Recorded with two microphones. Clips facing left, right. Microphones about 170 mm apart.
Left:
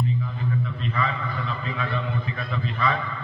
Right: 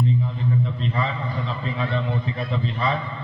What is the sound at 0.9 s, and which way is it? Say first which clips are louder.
A man's voice: right 1 dB; 30° right (ahead or behind).